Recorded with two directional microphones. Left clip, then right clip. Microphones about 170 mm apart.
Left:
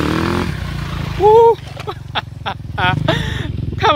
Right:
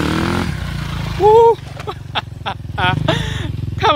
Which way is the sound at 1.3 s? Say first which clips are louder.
Even; centre (ahead or behind).